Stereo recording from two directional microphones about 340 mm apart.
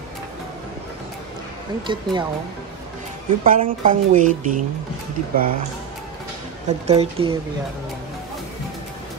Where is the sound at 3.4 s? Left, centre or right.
Right.